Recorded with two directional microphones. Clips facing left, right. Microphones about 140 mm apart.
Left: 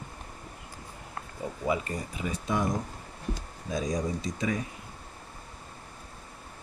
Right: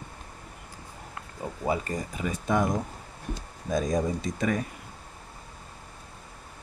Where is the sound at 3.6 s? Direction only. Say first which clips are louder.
Right 4 dB; 50° right (ahead or behind).